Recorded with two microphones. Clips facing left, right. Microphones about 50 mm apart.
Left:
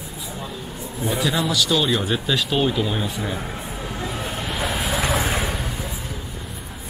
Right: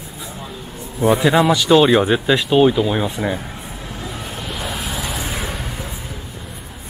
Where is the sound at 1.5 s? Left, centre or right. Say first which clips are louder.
Right 8 dB; right.